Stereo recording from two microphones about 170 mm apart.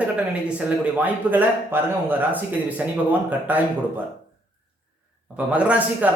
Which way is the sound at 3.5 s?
10° right (ahead or behind).